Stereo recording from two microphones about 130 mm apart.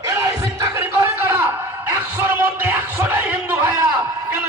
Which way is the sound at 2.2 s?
15° right (ahead or behind).